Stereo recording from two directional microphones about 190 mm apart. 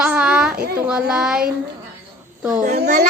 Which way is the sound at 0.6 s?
55° right (ahead or behind).